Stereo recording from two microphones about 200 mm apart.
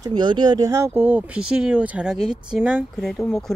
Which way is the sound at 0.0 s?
20° right (ahead or behind).